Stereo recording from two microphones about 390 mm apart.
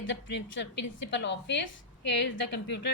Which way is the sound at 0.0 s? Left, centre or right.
Left.